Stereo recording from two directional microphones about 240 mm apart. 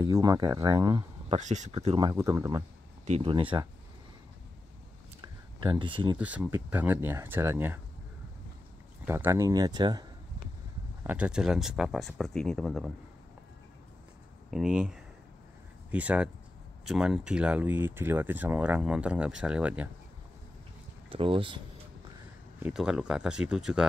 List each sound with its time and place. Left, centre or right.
0.0 s speech: centre
1.3 s speech: right
1.8 s speech: centre
5.2 s a sound: centre
6.1 s speech: centre
9.0 s speech: centre
11.1 s speech: centre
14.5 s speech: centre
21.1 s speech: right
22.6 s speech: centre